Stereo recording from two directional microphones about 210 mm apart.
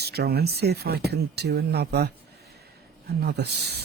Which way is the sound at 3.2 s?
50° right (ahead or behind).